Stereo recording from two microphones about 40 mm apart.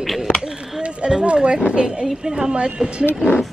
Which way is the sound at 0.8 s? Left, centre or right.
Right.